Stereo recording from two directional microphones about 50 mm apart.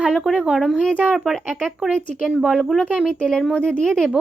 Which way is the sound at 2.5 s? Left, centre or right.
Centre.